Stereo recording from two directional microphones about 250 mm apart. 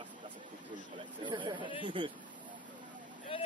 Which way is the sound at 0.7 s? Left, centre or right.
Centre.